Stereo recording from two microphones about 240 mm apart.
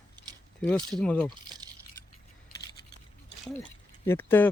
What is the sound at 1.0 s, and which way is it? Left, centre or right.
Speech, centre.